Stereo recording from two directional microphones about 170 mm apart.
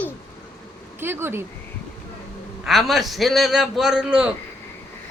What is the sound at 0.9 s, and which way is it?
Speech, 15° right (ahead or behind).